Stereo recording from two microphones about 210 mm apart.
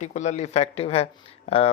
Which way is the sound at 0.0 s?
35° left (ahead or behind).